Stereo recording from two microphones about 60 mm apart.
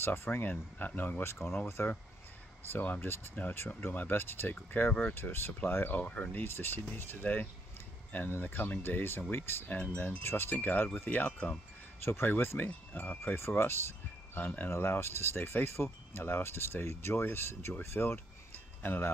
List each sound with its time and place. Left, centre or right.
0.0 s speech: left
5.9 s speech: left
11.3 s speech: centre
12.0 s speech: left
13.2 s speech: left
14.3 s speech: left
14.7 s speech: left